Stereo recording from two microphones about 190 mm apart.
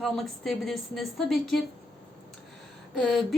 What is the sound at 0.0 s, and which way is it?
Speech, centre (ahead or behind).